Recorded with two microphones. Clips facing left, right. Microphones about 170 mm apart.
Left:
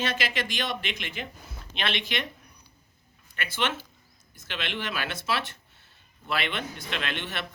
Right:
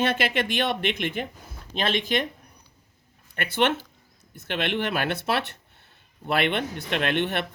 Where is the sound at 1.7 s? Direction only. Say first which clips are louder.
Right 6 dB; 45° right (ahead or behind).